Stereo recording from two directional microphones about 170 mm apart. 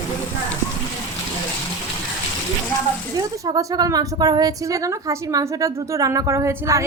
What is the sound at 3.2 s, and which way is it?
A woman's voice, 20° right (ahead or behind).